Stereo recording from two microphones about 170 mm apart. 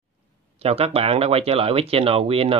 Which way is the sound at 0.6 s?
35° right (ahead or behind).